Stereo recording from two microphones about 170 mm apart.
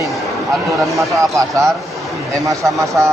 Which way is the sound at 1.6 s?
Centre (ahead or behind).